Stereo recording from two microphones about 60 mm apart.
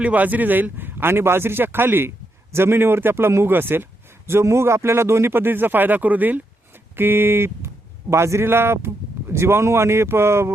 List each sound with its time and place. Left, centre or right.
0.0 s a man's voice: right
6.9 s speech: right